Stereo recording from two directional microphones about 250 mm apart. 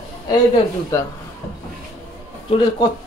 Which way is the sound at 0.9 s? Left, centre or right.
Centre.